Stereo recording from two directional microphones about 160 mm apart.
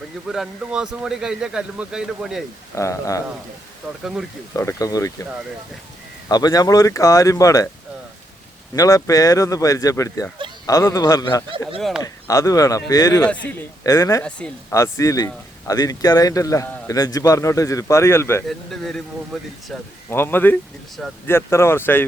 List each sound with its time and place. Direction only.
0.3 s a man's voice: 5° right (ahead or behind)
2.7 s speech: 20° left (ahead or behind)
4.0 s a man's voice: 5° right (ahead or behind)
4.5 s speech: 20° left (ahead or behind)
6.2 s speech: 25° left (ahead or behind)
8.7 s speech: 20° left (ahead or behind)
11.8 s a man's voice: centre (ahead or behind)
12.0 s speech: 20° left (ahead or behind)
14.3 s speech: 5° left (ahead or behind)
14.7 s speech: 20° left (ahead or behind)
18.4 s a man's voice: centre (ahead or behind)
20.1 s speech: 15° left (ahead or behind)